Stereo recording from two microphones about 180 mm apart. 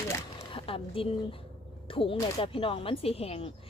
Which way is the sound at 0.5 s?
30° left (ahead or behind).